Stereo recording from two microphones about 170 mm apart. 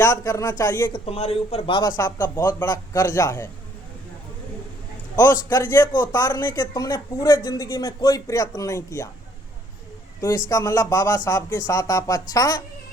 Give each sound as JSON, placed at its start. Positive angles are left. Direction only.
{"t": 0.0, "sound": "a woman's voice", "side_deg": 20}
{"t": 0.9, "sound": "a man's voice", "side_deg": 35}
{"t": 2.0, "sound": "a woman's voice", "side_deg": 15}
{"t": 5.1, "sound": "a woman's voice", "side_deg": 20}
{"t": 10.2, "sound": "a woman's voice", "side_deg": 20}